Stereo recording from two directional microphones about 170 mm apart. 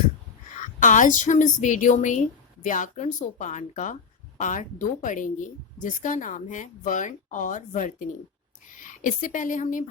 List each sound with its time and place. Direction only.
0.8 s speech: 50° left (ahead or behind)